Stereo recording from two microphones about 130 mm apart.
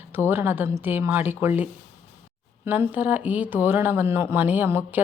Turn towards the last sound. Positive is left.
turn(degrees=-15)  # may be behind; listen again after turning